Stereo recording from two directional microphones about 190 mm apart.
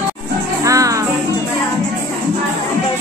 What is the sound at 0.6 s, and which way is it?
Music, 15° right (ahead or behind).